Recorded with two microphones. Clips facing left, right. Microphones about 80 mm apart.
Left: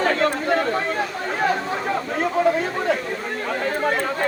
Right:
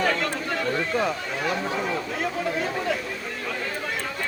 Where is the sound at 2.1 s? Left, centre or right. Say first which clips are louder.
Left 7 dB; left.